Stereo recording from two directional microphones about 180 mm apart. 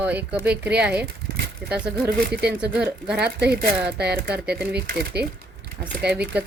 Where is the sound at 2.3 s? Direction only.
65° right (ahead or behind).